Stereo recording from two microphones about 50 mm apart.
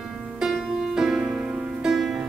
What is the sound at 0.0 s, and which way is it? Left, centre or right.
Music, centre.